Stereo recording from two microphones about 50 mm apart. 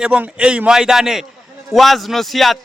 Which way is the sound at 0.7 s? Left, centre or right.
Centre.